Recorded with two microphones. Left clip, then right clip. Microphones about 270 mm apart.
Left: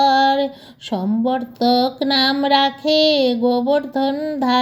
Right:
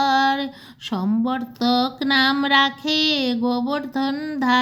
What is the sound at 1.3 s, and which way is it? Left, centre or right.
Female singing, centre.